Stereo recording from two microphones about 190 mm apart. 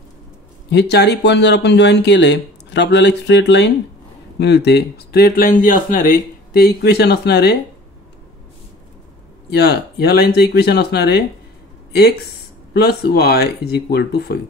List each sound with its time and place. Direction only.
0.7 s speech: 60° left (ahead or behind)
9.5 s speech: 60° left (ahead or behind)
12.7 s speech: 60° left (ahead or behind)